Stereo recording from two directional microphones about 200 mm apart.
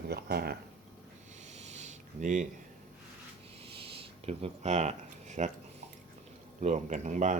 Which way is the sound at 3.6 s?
30° right (ahead or behind).